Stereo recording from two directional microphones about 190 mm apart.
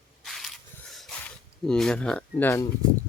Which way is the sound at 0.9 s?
5° left (ahead or behind).